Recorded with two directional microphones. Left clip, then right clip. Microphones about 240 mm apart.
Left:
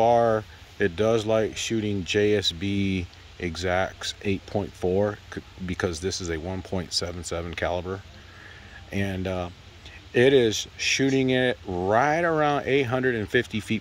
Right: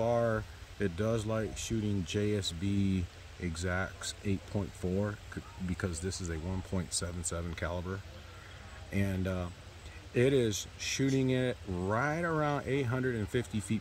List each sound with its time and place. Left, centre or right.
0.0 s speech: centre
5.7 s speech: centre